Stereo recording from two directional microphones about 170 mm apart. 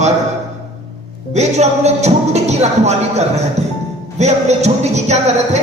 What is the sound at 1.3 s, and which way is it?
Speech, 40° right (ahead or behind).